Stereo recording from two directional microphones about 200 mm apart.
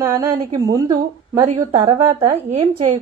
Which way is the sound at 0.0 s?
15° right (ahead or behind).